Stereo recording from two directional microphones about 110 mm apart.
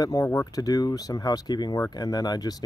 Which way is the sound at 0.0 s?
35° left (ahead or behind).